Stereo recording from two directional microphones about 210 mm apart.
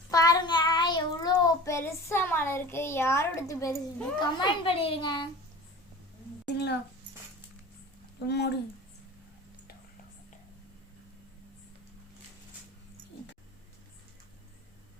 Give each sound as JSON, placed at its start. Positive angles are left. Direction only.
{"t": 0.1, "sound": "child singing", "side_deg": 15}
{"t": 4.6, "sound": "a child's voice", "side_deg": 25}
{"t": 6.5, "sound": "a sound", "side_deg": 55}
{"t": 8.3, "sound": "speech", "side_deg": 55}